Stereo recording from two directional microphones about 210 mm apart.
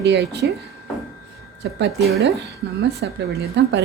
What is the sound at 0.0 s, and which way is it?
Speech, 55° right (ahead or behind).